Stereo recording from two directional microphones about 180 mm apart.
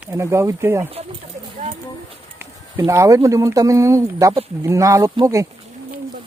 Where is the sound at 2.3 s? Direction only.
15° right (ahead or behind).